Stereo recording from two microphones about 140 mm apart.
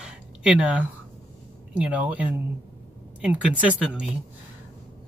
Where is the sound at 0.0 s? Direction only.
5° right (ahead or behind).